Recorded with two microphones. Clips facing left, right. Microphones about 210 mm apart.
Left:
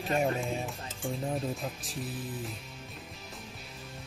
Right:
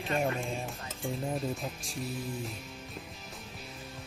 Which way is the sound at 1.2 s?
Centre (ahead or behind).